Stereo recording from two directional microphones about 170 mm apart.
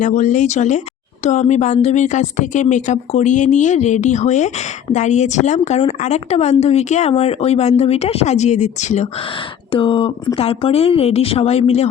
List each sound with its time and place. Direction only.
0.0 s a woman's voice: 45° left (ahead or behind)
9.7 s a woman's voice: 30° left (ahead or behind)